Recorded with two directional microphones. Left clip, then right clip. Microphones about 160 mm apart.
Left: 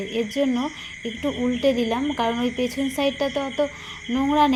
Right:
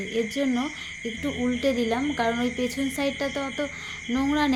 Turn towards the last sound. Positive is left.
turn(degrees=-5)  # may be behind; listen again after turning